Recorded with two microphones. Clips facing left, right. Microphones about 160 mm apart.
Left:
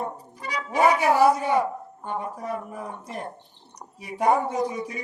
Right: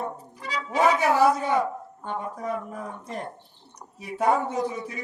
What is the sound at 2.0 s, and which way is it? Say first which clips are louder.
A man's voice: even; 10° left (ahead or behind).